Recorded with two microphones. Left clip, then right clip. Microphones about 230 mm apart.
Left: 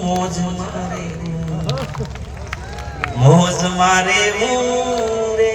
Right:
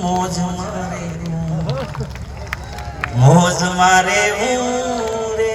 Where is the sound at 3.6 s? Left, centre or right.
Centre.